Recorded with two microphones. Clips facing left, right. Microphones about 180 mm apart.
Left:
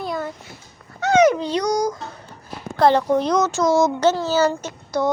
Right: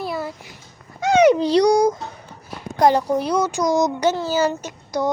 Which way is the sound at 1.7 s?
25° right (ahead or behind).